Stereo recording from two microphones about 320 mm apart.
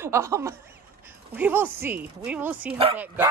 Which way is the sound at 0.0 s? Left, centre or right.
Centre.